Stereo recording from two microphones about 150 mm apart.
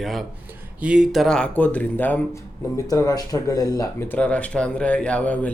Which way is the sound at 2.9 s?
25° left (ahead or behind).